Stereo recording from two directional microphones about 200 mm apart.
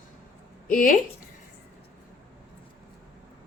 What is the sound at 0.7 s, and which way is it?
Speech, 45° left (ahead or behind).